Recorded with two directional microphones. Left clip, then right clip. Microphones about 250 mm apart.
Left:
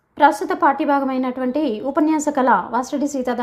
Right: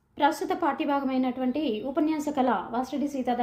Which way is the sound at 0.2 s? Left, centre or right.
Centre.